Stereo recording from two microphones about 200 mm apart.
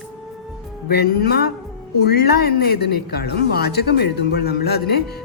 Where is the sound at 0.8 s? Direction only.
50° left (ahead or behind).